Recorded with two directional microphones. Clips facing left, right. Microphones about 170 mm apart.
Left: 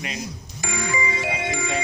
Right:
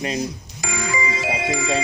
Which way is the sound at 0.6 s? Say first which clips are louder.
Right 1 dB; 90° right.